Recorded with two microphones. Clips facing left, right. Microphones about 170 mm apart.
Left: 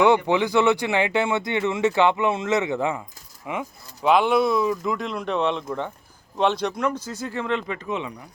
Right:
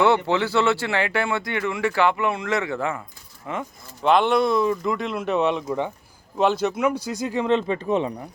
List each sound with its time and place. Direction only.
0.0 s speech: 15° left (ahead or behind); by 8.1 s 40° right (ahead or behind)